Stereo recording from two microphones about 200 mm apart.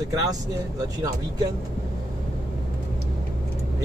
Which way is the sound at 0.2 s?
20° right (ahead or behind).